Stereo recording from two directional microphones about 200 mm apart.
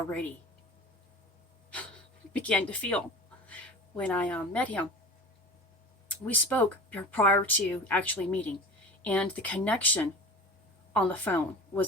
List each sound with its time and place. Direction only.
2.3 s speech: 5° left (ahead or behind)
6.2 s speech: 10° left (ahead or behind)